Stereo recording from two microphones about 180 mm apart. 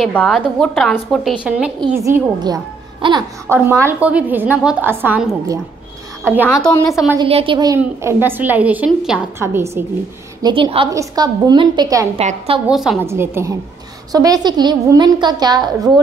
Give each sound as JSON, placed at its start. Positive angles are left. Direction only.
{"t": 0.0, "sound": "a woman's voice", "side_deg": 5}
{"t": 2.0, "sound": "speech", "side_deg": -20}
{"t": 3.4, "sound": "a woman's voice", "side_deg": -15}
{"t": 6.4, "sound": "a woman's voice", "side_deg": 10}
{"t": 6.9, "sound": "a woman's voice", "side_deg": -5}
{"t": 7.2, "sound": "a woman's voice", "side_deg": -30}
{"t": 10.4, "sound": "a woman's voice", "side_deg": -30}
{"t": 12.2, "sound": "a woman's voice", "side_deg": -35}
{"t": 12.6, "sound": "a woman's voice", "side_deg": -5}
{"t": 13.0, "sound": "a woman's voice", "side_deg": -15}